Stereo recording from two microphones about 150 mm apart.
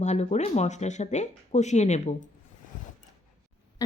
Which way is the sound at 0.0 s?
50° left (ahead or behind).